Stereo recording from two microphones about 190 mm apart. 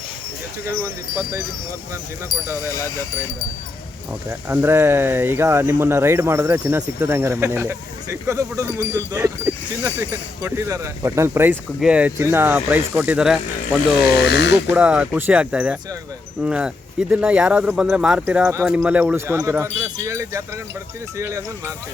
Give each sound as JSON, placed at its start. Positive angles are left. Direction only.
{"t": 2.6, "sound": "speech", "side_deg": 15}
{"t": 4.3, "sound": "speech", "side_deg": -10}
{"t": 14.3, "sound": "speech", "side_deg": 60}
{"t": 14.7, "sound": "speech", "side_deg": -5}